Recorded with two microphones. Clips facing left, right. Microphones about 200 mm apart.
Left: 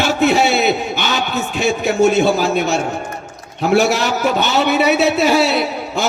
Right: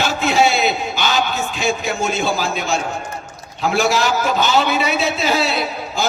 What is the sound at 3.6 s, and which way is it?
A man's voice, 65° left (ahead or behind).